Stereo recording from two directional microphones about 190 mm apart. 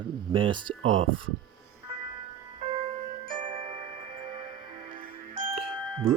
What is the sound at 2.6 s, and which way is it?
Music, 30° right (ahead or behind).